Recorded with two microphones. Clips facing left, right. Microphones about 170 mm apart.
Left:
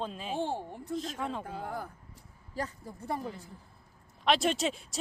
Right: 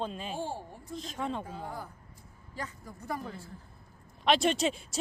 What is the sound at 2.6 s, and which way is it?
Speech, 30° left (ahead or behind).